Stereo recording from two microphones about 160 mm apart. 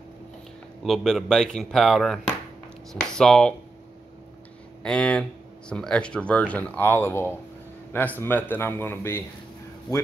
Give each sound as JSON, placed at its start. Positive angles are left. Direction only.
{"t": 0.8, "sound": "speech", "side_deg": 0}
{"t": 4.8, "sound": "speech", "side_deg": 5}